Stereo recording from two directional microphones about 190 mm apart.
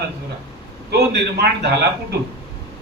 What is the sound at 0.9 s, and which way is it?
Speech, 60° right (ahead or behind).